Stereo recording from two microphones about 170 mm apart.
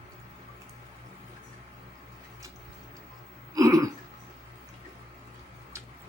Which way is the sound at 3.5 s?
20° right (ahead or behind).